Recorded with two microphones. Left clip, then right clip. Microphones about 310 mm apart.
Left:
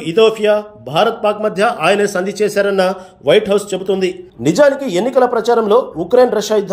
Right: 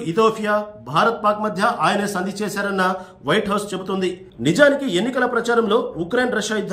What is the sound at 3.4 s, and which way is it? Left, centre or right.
Speech, left.